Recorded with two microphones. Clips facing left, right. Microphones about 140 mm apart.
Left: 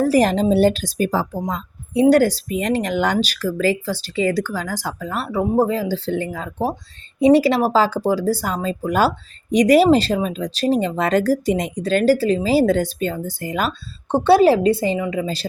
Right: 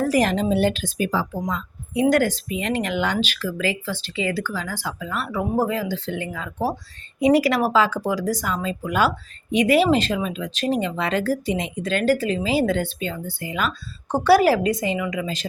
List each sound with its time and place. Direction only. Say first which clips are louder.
0.0 s speech: left 4 dB; 35° left (ahead or behind)
5.2 s speech: left 5 dB; 30° left (ahead or behind)
14.1 s a woman's voice: left 3 dB; 25° left (ahead or behind)